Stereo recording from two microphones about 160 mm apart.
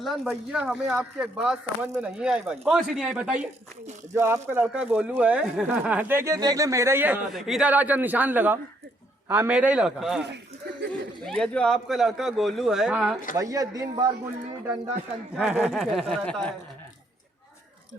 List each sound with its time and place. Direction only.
0.0 s speech: centre (ahead or behind)
4.1 s speech: 15° right (ahead or behind)
11.3 s speech: 5° left (ahead or behind)
13.3 s a man's voice: 20° right (ahead or behind)
15.4 s speech: 5° right (ahead or behind)